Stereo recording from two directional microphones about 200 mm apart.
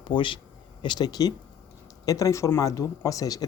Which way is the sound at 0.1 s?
25° left (ahead or behind).